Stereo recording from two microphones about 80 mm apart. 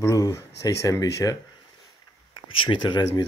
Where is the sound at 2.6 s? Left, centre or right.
Left.